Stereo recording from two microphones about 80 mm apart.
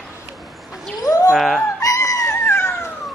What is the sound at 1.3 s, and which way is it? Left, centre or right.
Speech, centre.